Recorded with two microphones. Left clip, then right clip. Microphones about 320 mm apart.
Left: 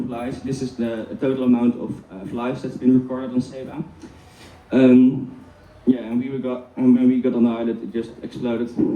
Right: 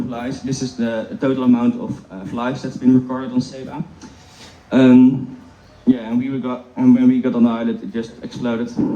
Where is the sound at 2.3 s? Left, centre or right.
Right.